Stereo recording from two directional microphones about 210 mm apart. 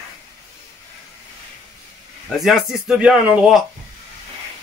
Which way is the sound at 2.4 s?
Centre (ahead or behind).